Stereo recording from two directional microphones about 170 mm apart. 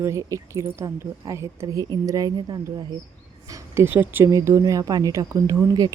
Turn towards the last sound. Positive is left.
turn(degrees=-20)  # may be behind; listen again after turning